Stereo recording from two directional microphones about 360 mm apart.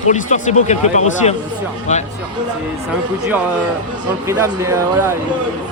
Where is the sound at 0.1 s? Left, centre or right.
Centre.